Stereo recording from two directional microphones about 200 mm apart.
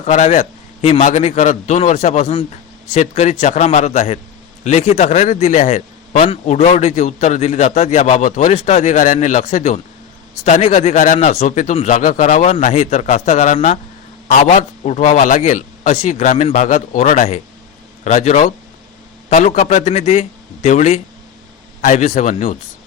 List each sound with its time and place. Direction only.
0.0 s speech: 35° left (ahead or behind)